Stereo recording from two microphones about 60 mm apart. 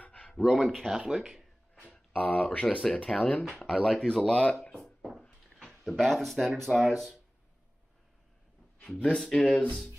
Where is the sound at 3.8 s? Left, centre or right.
Centre.